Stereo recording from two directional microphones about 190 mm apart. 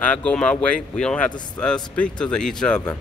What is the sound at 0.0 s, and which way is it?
A man's voice, 5° left (ahead or behind).